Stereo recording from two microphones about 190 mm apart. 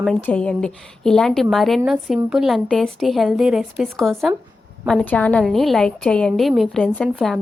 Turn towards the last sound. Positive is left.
turn(degrees=5)  # may be behind; listen again after turning